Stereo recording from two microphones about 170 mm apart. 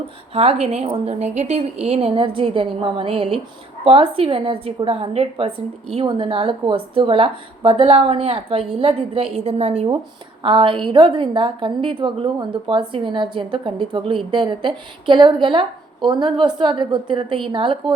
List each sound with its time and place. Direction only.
0.3 s a woman's voice: 40° right (ahead or behind)